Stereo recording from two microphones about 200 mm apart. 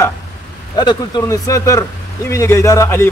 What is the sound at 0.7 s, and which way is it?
Speech, 20° left (ahead or behind).